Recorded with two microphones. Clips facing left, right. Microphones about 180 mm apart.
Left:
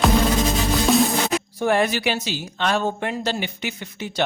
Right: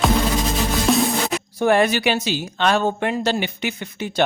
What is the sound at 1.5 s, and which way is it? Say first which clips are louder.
Speech: right 4 dB; 70° right (ahead or behind).